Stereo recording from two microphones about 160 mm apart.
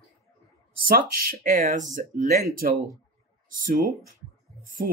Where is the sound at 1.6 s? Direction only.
50° right (ahead or behind).